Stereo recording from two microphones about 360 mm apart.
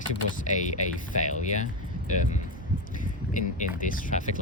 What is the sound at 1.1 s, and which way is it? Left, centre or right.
Speech, centre.